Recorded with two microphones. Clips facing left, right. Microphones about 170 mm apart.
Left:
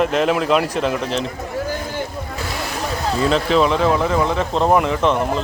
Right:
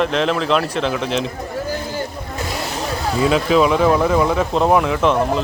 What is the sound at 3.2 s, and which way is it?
A man's voice, 5° right (ahead or behind).